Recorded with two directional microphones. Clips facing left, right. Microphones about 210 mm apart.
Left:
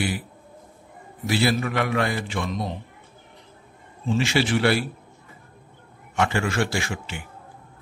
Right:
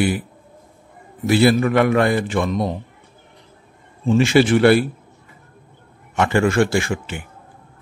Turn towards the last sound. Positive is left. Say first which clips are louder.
# right 8 dB
turn(degrees=-50)  # may be behind; listen again after turning